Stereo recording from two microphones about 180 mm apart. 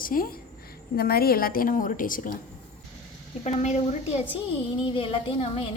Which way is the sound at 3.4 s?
40° left (ahead or behind).